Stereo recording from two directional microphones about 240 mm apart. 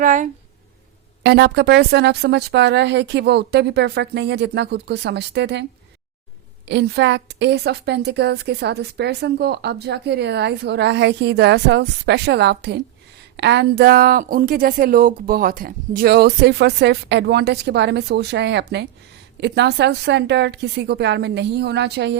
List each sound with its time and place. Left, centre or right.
0.0 s speech: right
1.2 s a woman's voice: right
6.7 s a woman's voice: right